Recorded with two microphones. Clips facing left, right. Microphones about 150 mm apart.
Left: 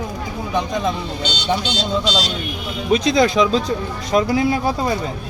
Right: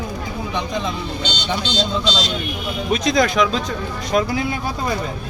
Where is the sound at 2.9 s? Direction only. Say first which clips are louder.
Left 3 dB; 30° left (ahead or behind).